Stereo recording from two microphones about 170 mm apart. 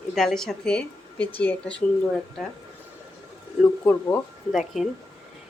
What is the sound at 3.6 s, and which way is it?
Speech, 10° left (ahead or behind).